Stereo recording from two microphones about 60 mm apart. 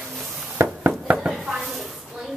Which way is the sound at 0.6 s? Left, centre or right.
Right.